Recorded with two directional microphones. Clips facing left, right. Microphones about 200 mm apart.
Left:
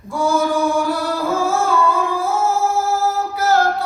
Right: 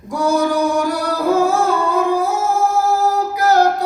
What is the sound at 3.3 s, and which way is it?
Music, 15° right (ahead or behind).